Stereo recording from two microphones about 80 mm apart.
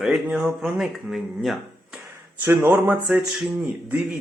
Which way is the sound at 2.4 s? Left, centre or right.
Right.